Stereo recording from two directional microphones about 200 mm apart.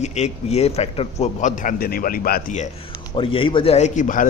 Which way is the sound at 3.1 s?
25° left (ahead or behind).